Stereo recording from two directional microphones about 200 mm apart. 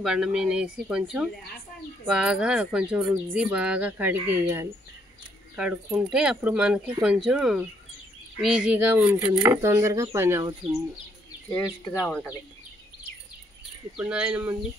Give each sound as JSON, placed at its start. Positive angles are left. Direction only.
{"t": 0.0, "sound": "speech", "side_deg": -5}
{"t": 11.9, "sound": "speech", "side_deg": 15}
{"t": 13.9, "sound": "speech", "side_deg": -5}